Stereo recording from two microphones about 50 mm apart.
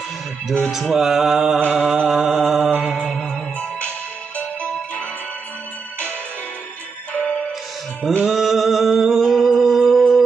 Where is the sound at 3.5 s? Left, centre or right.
Left.